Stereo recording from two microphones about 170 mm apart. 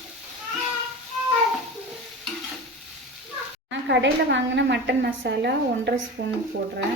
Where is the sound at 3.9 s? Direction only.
90° right; by 6.3 s 75° right (ahead or behind).